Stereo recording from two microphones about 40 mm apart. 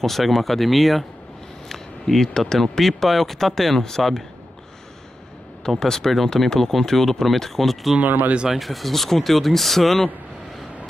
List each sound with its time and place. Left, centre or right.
0.0 s speech: centre
1.7 s a sound: centre
2.5 s speech: centre
5.8 s speech: centre
8.0 s speech: right
8.5 s speech: centre